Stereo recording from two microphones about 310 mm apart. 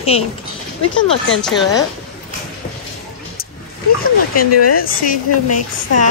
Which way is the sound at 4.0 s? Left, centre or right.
Left.